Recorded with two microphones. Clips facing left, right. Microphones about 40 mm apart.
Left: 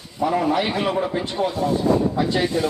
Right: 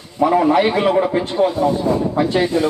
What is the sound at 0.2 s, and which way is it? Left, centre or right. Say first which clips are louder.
Speech: right 6 dB; right.